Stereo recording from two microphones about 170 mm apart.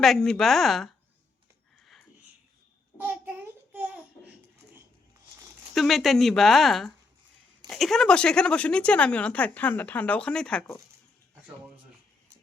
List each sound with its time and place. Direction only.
0.0 s speech: centre (ahead or behind)
1.8 s sniff: centre (ahead or behind)
3.0 s child singing: 10° right (ahead or behind)
5.7 s a woman's voice: centre (ahead or behind)